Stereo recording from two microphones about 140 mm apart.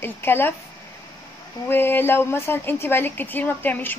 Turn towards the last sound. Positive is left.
turn(degrees=15)  # may be behind; listen again after turning